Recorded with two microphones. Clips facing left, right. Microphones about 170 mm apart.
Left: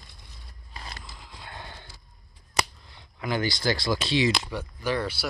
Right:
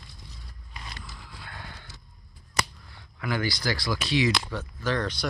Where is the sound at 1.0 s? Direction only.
20° left (ahead or behind).